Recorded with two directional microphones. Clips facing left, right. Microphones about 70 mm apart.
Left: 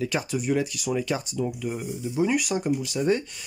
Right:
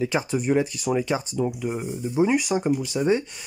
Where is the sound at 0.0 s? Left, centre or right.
Right.